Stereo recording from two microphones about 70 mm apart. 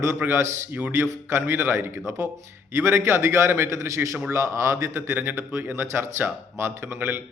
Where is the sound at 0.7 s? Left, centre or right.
Right.